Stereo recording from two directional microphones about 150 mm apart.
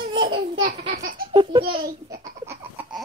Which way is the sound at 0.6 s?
60° right (ahead or behind).